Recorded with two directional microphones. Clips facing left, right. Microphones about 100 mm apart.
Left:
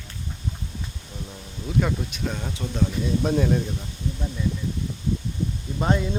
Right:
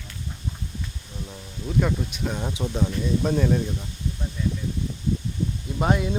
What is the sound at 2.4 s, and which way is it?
Speech, 15° right (ahead or behind).